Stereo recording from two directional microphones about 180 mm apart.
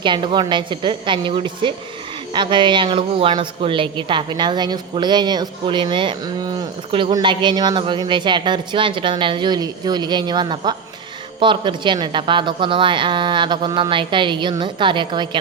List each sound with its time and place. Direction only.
0.0 s speech: 25° right (ahead or behind)